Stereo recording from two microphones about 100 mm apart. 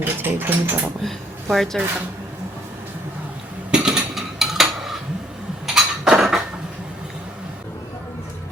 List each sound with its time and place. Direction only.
0.0 s speech: 20° right (ahead or behind)
1.0 s speech: centre (ahead or behind)
3.7 s a sound: 10° right (ahead or behind)
5.6 s dishes: 5° right (ahead or behind)